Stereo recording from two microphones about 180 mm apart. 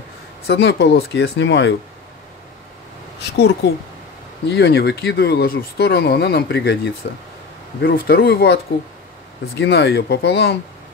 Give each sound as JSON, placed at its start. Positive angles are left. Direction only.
{"t": 0.5, "sound": "speech", "side_deg": 70}
{"t": 3.2, "sound": "speech", "side_deg": 70}
{"t": 9.6, "sound": "speech", "side_deg": 70}